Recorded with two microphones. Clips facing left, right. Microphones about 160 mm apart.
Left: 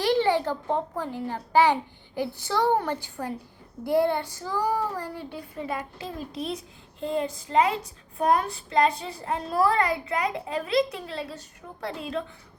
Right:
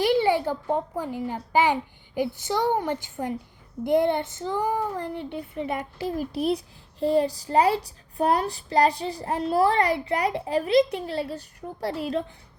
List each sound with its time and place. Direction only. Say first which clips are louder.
0.0 s a child's voice: right 1 dB; 10° right (ahead or behind)
3.8 s child singing: right 2 dB; 20° right (ahead or behind)
7.0 s a child's voice: right 6 dB; 35° right (ahead or behind)